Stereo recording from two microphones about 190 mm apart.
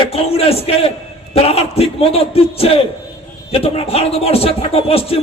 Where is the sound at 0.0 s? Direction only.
30° left (ahead or behind).